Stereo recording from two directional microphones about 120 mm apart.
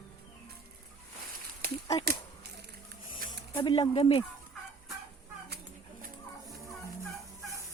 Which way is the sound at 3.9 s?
55° left (ahead or behind).